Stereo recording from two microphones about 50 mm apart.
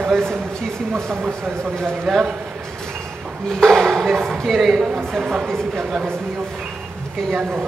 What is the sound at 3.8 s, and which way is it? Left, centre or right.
Speech, centre.